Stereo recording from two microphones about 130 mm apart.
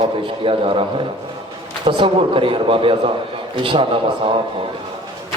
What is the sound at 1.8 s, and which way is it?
A man's voice, 40° right (ahead or behind).